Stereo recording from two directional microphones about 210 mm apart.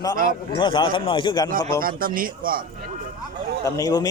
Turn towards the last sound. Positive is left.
turn(degrees=20)  # may be behind; listen again after turning